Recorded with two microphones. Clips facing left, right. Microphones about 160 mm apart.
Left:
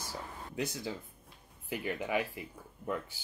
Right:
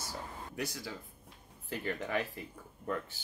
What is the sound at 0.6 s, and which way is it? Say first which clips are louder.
Speech: left 4 dB; 20° left (ahead or behind).